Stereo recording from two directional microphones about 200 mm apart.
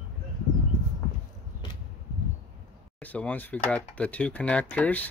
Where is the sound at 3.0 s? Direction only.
5° left (ahead or behind).